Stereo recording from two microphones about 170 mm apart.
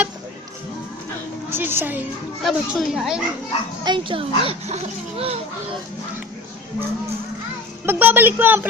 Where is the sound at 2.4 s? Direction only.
Centre (ahead or behind).